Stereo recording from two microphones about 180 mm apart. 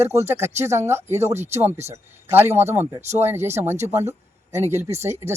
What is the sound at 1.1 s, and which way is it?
Speech, 40° right (ahead or behind).